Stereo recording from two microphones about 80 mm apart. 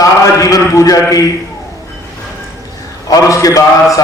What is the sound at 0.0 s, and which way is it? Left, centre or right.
Mantra, left.